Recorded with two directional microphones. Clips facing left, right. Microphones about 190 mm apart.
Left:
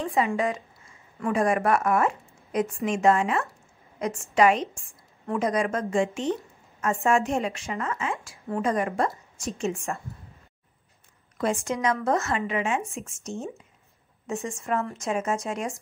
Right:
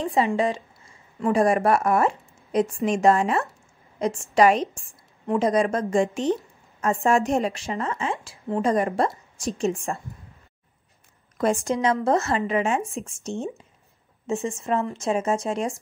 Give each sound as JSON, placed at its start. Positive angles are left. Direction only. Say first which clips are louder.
{"t": 0.2, "sound": "a woman's voice", "louder": "right 3 dB", "side_deg": -30}
{"t": 5.2, "sound": "speech", "louder": "right 4 dB", "side_deg": -20}
{"t": 5.5, "sound": "a woman's voice", "louder": "right 3 dB", "side_deg": -35}
{"t": 11.3, "sound": "a woman's voice", "louder": "right 4 dB", "side_deg": -40}